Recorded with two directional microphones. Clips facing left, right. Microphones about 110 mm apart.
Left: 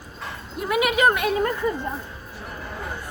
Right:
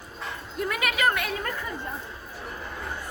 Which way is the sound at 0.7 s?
15° left (ahead or behind).